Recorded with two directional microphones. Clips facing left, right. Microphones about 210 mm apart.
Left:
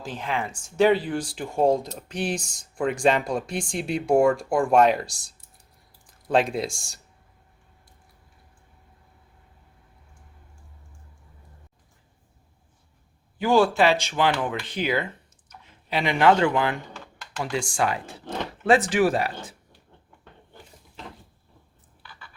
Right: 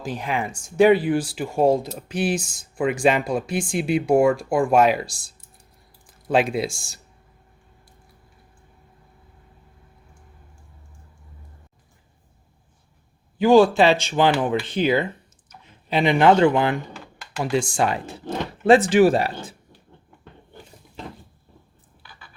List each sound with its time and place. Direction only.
0.0 s speech: 10° right (ahead or behind)
5.0 s speech: 45° left (ahead or behind)
6.2 s speech: 5° right (ahead or behind)
13.4 s speech: 20° right (ahead or behind)
16.9 s a sound: 10° right (ahead or behind)
17.4 s speech: 25° right (ahead or behind)